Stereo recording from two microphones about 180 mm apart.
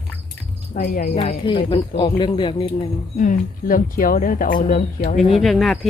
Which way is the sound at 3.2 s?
45° left (ahead or behind).